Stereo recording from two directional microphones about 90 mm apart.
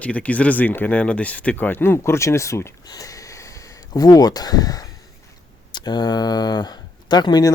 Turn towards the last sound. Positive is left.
turn(degrees=50)  # may be behind; listen again after turning